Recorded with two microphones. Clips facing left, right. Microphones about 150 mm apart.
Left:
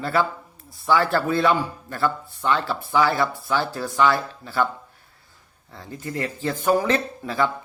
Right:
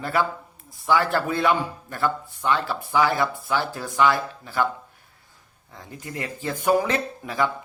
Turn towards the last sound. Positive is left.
turn(degrees=-15)  # may be behind; listen again after turning